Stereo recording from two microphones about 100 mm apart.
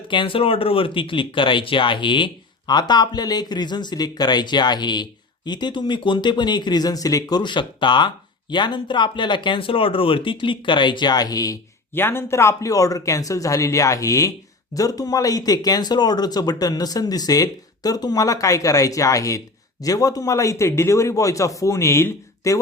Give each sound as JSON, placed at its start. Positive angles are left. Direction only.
{"t": 0.1, "sound": "speech", "side_deg": 60}
{"t": 11.9, "sound": "speech", "side_deg": 20}